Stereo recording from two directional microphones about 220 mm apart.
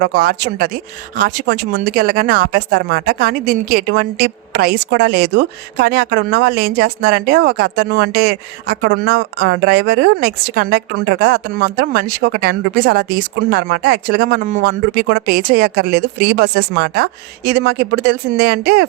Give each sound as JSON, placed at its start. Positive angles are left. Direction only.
{"t": 0.0, "sound": "speech", "side_deg": -50}